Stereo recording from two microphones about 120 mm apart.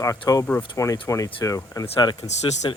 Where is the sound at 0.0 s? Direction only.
25° left (ahead or behind).